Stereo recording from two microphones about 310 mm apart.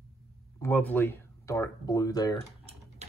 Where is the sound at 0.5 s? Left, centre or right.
Centre.